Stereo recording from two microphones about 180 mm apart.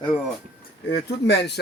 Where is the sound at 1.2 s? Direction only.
70° left (ahead or behind).